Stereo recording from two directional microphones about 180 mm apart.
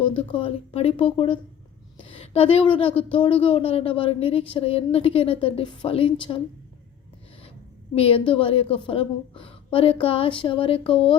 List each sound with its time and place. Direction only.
0.2 s a woman's voice: 30° left (ahead or behind)
7.9 s a woman's voice: 30° left (ahead or behind)